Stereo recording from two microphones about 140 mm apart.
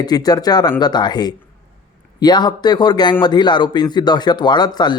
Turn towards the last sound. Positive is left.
turn(degrees=30)  # may be behind; listen again after turning